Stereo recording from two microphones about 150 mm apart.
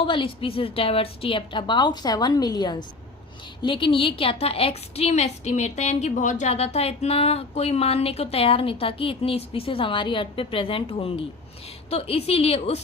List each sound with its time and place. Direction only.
0.0 s a woman's voice: 35° left (ahead or behind)